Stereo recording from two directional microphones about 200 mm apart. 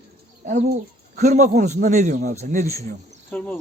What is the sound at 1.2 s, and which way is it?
Speech, 35° right (ahead or behind).